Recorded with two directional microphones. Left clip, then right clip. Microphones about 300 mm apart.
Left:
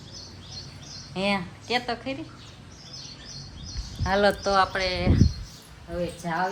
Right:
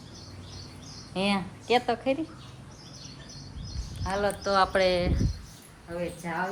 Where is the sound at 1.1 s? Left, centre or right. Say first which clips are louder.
Left 2 dB; centre.